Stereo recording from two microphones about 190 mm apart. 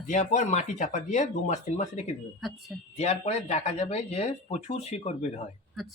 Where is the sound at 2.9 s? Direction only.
35° left (ahead or behind).